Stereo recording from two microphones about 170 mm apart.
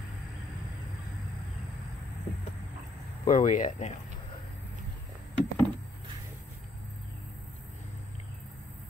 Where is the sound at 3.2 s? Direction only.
50° left (ahead or behind).